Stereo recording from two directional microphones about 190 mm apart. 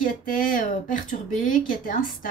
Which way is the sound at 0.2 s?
45° left (ahead or behind).